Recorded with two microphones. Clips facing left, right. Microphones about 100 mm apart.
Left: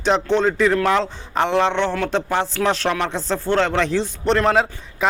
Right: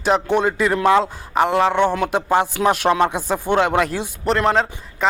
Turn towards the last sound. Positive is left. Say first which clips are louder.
# left 1 dB
turn(degrees=0)  # may be behind; listen again after turning